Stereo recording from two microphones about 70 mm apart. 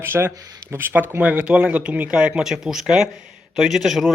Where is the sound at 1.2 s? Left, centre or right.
Centre.